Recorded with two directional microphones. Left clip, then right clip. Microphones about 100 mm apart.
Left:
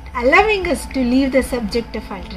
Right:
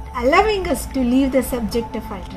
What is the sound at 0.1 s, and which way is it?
A woman's voice, 15° left (ahead or behind).